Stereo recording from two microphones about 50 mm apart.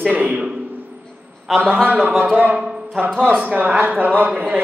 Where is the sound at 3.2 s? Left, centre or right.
Right.